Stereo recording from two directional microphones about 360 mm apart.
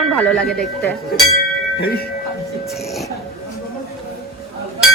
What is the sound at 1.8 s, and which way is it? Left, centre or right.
Speech, left.